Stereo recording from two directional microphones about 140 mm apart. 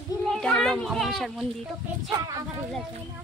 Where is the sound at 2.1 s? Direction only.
25° right (ahead or behind).